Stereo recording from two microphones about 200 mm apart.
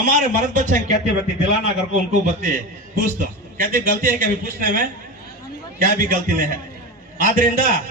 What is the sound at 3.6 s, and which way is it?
A man's voice, 45° right (ahead or behind).